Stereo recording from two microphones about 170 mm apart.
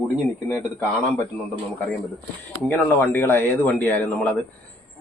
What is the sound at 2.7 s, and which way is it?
Speech, 10° left (ahead or behind).